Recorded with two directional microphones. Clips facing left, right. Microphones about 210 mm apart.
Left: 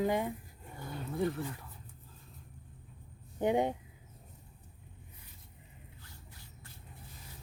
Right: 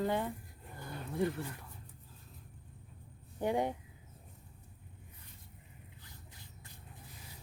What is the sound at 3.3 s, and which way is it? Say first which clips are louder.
Speech: left 3 dB; 20° left (ahead or behind).